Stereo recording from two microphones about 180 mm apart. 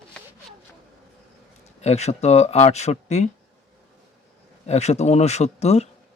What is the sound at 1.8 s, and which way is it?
Speech, 35° left (ahead or behind).